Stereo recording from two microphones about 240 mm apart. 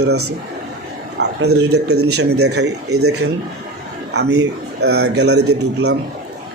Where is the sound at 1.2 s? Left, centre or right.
Right.